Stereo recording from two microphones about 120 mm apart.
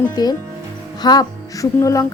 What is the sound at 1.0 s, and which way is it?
Music, 35° left (ahead or behind).